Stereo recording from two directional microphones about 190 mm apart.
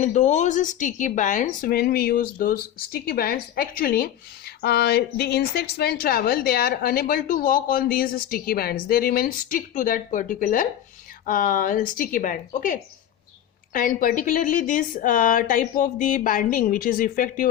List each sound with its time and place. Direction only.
0.0 s speech: 40° left (ahead or behind)